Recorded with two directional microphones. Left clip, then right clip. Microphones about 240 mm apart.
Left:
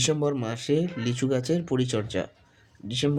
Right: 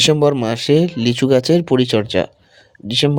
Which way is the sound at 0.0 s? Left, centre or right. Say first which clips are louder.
Right 12 dB; right.